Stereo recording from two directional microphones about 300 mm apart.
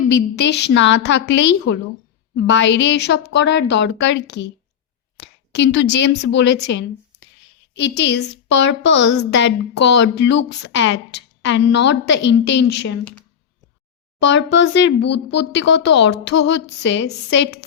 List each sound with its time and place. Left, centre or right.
0.1 s a woman's voice: left
14.6 s a woman's voice: left